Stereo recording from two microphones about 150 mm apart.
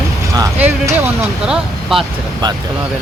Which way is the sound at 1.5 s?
Centre (ahead or behind).